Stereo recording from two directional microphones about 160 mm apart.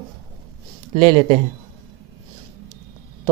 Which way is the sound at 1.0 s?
40° right (ahead or behind).